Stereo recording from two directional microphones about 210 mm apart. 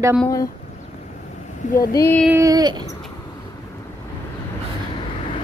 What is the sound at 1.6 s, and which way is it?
Speech, 35° left (ahead or behind).